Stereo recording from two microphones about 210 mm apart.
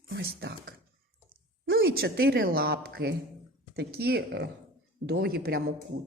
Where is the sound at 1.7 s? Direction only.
45° right (ahead or behind).